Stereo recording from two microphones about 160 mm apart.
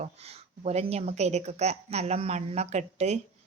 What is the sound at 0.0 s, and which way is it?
A woman's voice, 40° right (ahead or behind).